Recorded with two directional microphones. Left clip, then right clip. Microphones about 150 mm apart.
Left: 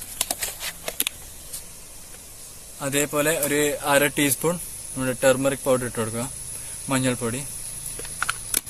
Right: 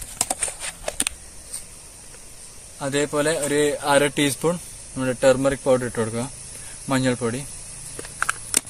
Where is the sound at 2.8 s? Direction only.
40° right (ahead or behind).